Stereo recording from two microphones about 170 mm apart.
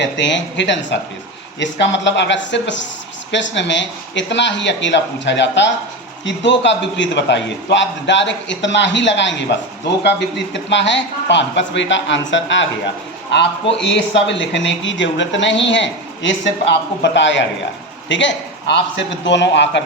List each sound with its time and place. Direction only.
0.0 s speech: 90° left